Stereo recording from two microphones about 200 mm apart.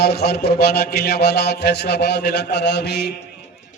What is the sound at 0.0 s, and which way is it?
Mantra, 55° left (ahead or behind).